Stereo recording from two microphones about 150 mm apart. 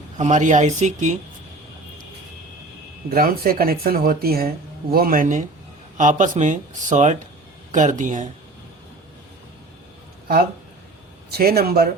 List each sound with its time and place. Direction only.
0.2 s speech: 50° right (ahead or behind)
3.1 s speech: 75° right (ahead or behind); by 8.3 s 55° right (ahead or behind)
11.3 s speech: 90° right